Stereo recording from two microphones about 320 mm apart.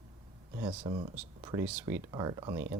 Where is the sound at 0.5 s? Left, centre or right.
Centre.